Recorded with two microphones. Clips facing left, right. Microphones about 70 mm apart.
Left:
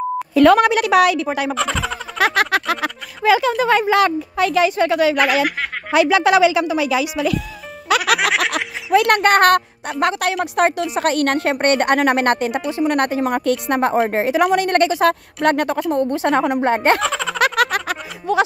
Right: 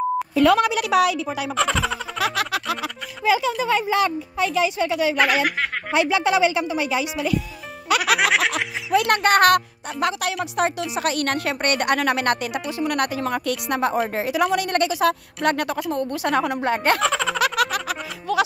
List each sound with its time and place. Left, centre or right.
0.5 s speech: left
1.5 s speech: centre
2.1 s speech: left
5.2 s speech: centre
5.9 s a woman's voice: left
8.9 s a woman's voice: left
11.0 s a woman's voice: left
17.0 s a sound: centre
17.4 s snicker: left
18.3 s music: left